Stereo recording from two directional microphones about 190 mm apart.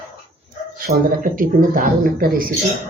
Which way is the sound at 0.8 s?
45° right (ahead or behind).